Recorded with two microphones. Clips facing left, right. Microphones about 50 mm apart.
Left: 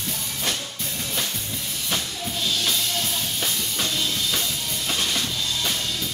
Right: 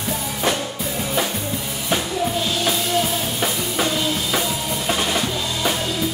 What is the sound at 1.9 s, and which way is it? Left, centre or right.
Music, centre.